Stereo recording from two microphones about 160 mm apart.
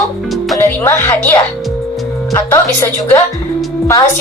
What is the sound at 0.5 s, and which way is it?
Speech, 15° left (ahead or behind).